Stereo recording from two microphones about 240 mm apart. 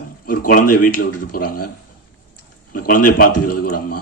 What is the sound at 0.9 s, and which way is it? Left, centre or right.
Speech, left.